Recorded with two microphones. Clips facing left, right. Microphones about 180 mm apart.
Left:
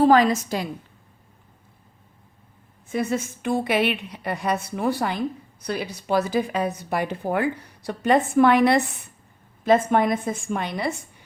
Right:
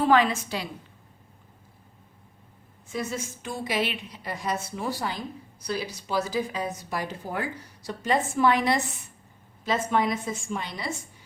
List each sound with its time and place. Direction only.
0.0 s a woman's voice: 40° left (ahead or behind)
2.9 s a woman's voice: 60° left (ahead or behind)